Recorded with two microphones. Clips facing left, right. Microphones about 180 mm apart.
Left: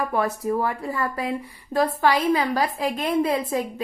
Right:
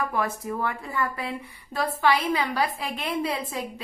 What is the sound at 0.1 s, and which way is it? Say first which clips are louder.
A woman's voice: left 5 dB; 35° left (ahead or behind).